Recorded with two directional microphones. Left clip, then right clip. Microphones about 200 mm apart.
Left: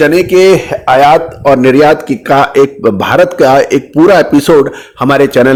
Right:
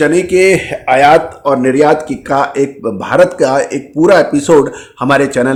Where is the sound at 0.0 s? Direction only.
30° left (ahead or behind).